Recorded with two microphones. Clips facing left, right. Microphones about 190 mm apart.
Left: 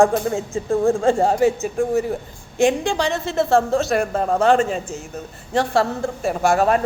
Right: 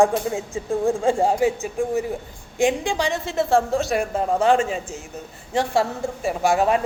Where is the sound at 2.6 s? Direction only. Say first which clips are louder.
Left 3 dB; 15° right (ahead or behind).